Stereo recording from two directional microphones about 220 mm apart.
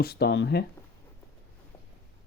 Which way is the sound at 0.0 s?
45° left (ahead or behind).